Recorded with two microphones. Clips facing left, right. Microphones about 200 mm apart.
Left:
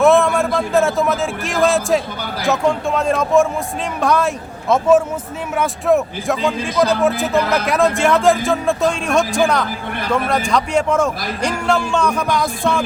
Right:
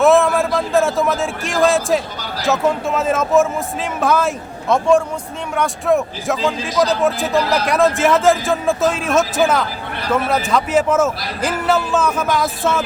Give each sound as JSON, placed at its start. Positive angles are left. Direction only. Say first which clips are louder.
{"t": 0.0, "sound": "a sound", "louder": "even", "side_deg": 0}
{"t": 2.5, "sound": "a man's voice", "louder": "even", "side_deg": -5}
{"t": 7.4, "sound": "speech", "louder": "even", "side_deg": 55}
{"t": 7.7, "sound": "a man's voice", "louder": "right 1 dB", "side_deg": 0}